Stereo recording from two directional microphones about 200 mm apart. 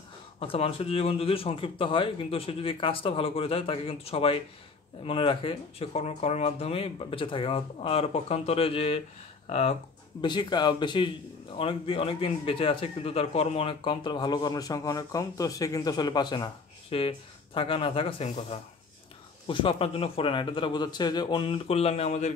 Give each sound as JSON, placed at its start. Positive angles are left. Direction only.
{"t": 0.4, "sound": "a man's voice", "side_deg": 30}
{"t": 10.2, "sound": "a man's voice", "side_deg": 20}